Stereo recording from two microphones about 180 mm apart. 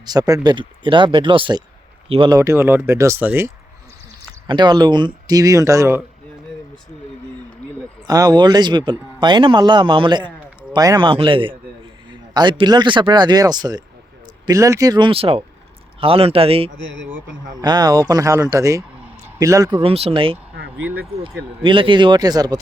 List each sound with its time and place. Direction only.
0.0 s speech: 20° right (ahead or behind)
2.4 s speech: 15° right (ahead or behind)
4.4 s speech: 25° right (ahead or behind)
8.0 s speech: 20° right (ahead or behind)
19.8 s speech: 35° right (ahead or behind)
21.6 s speech: 30° right (ahead or behind)